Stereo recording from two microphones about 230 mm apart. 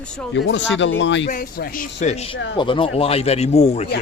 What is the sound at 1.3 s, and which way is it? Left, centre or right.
A man's voice, left.